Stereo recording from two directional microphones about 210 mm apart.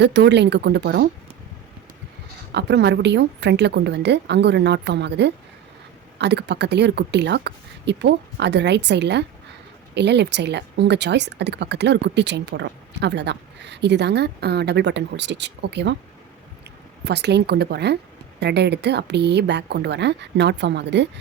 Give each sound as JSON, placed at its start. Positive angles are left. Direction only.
{"t": 0.0, "sound": "speech", "side_deg": -55}
{"t": 2.5, "sound": "speech", "side_deg": -55}
{"t": 17.0, "sound": "speech", "side_deg": -50}